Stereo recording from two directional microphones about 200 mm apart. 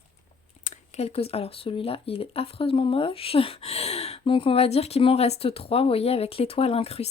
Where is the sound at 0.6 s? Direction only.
35° left (ahead or behind).